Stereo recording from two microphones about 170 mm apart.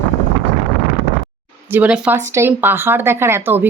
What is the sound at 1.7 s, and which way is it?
Speech, 10° right (ahead or behind).